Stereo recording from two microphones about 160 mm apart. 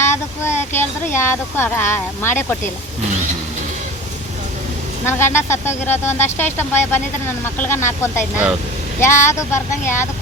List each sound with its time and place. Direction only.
0.0 s a sound: 15° left (ahead or behind)
0.7 s speech: 15° left (ahead or behind)
5.0 s speech: 15° left (ahead or behind)